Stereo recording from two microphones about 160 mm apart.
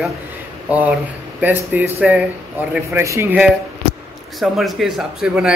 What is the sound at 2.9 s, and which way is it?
Speech, 15° right (ahead or behind).